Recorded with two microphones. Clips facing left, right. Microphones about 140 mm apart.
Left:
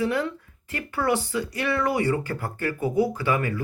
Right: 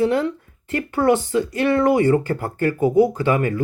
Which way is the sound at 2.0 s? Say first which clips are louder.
Right 8 dB; 45° right (ahead or behind).